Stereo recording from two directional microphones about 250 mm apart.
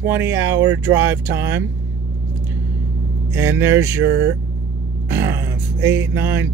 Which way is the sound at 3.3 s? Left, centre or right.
Centre.